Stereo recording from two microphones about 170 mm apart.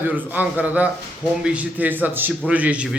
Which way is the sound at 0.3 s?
10° right (ahead or behind).